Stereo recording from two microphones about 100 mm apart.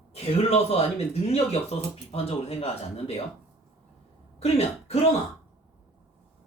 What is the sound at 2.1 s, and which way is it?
Speech, 85° left.